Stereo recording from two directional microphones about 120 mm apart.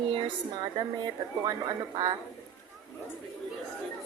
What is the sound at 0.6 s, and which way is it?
A woman's voice, 35° right (ahead or behind).